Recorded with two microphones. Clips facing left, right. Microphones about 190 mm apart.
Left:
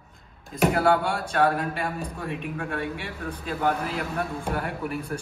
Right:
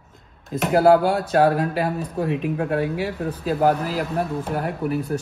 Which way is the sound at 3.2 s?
35° right (ahead or behind).